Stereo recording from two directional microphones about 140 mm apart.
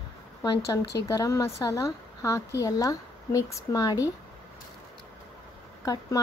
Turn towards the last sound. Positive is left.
turn(degrees=25)  # may be behind; listen again after turning